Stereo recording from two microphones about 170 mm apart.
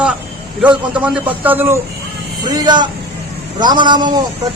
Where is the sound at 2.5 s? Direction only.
25° right (ahead or behind).